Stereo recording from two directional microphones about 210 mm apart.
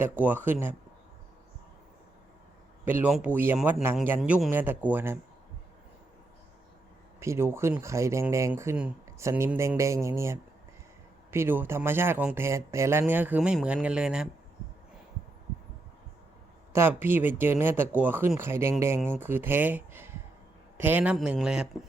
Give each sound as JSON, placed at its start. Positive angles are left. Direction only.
{"t": 0.0, "sound": "speech", "side_deg": -10}
{"t": 2.8, "sound": "speech", "side_deg": -10}
{"t": 7.2, "sound": "speech", "side_deg": -10}
{"t": 16.7, "sound": "speech", "side_deg": -10}